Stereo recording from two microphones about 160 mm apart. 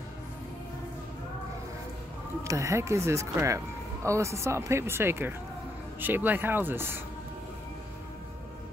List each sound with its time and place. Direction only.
2.4 s speech: 20° right (ahead or behind)